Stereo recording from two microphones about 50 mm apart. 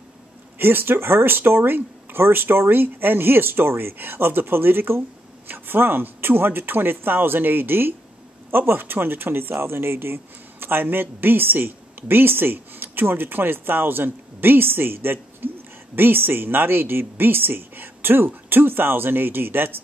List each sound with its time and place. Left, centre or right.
0.6 s speech: right